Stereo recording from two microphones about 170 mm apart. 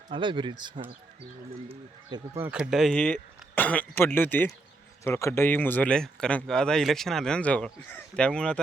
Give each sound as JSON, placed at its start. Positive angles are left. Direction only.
{"t": 0.1, "sound": "speech", "side_deg": -30}
{"t": 2.4, "sound": "speech", "side_deg": -5}